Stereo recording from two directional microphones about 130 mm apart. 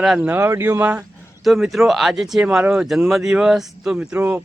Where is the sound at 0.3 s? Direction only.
20° right (ahead or behind).